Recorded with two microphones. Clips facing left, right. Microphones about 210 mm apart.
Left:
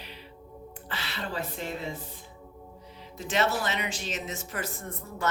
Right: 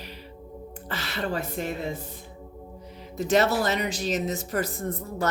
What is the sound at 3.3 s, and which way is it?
Speech, 40° right (ahead or behind).